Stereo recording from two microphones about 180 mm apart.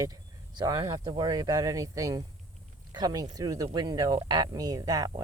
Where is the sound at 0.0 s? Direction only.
20° right (ahead or behind).